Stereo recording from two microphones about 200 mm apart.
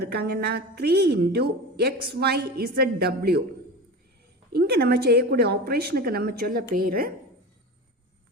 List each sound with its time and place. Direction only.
0.0 s a woman's voice: 55° right (ahead or behind)
4.5 s a woman's voice: 50° right (ahead or behind)